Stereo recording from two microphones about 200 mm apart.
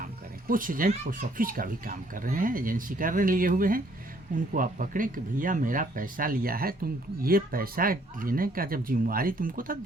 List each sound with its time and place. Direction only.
0.4 s speech: 45° right (ahead or behind)